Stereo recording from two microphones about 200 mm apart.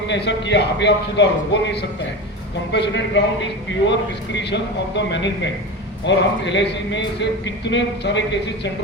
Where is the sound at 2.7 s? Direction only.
60° left (ahead or behind).